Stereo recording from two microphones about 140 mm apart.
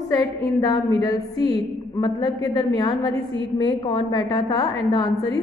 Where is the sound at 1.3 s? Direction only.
40° right (ahead or behind).